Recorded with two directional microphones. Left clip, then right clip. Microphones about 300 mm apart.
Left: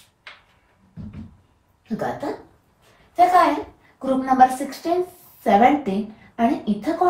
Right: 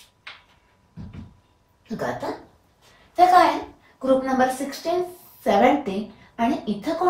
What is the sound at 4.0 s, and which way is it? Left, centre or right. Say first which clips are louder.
A woman's voice: left 4 dB; centre.